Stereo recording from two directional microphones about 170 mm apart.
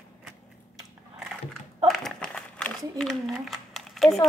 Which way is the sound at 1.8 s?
Centre (ahead or behind).